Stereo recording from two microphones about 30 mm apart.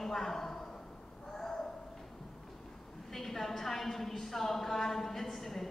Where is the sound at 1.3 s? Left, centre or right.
Centre.